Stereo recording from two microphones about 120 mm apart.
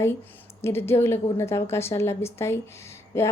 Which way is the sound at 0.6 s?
20° left (ahead or behind).